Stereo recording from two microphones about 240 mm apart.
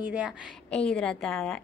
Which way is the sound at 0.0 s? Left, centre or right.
Centre.